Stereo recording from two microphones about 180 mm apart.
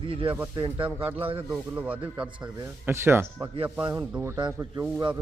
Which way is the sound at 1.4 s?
10° right (ahead or behind).